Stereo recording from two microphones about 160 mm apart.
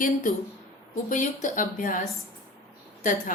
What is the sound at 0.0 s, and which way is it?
A woman's voice, 55° left (ahead or behind).